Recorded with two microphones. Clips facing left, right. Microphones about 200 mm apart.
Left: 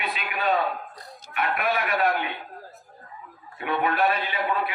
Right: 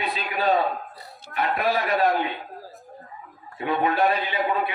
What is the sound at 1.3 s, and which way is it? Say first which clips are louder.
Speech: right 2 dB; 35° right (ahead or behind).